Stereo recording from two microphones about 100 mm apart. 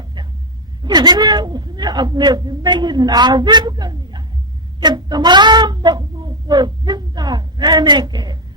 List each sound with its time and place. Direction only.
0.8 s speech: 45° right (ahead or behind)